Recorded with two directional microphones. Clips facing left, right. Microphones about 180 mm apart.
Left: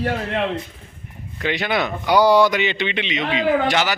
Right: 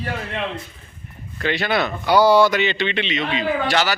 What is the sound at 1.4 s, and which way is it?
Speech, 15° left (ahead or behind).